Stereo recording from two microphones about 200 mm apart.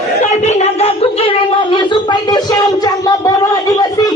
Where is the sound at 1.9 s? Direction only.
20° left (ahead or behind).